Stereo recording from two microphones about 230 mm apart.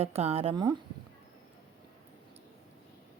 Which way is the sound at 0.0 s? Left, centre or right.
Right.